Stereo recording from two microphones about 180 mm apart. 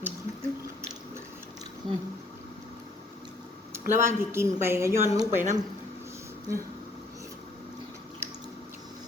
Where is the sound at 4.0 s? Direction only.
15° right (ahead or behind).